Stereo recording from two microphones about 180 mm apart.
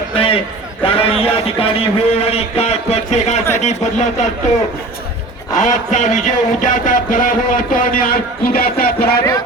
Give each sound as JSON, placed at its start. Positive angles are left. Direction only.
{"t": 0.1, "sound": "a sound", "side_deg": 30}
{"t": 0.8, "sound": "a man's voice", "side_deg": 30}
{"t": 5.5, "sound": "a man's voice", "side_deg": 45}